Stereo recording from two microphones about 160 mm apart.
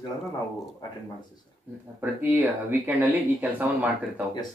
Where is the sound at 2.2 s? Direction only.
15° right (ahead or behind).